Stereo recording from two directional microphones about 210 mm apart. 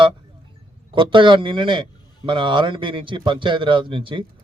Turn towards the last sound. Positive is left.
turn(degrees=-25)  # may be behind; listen again after turning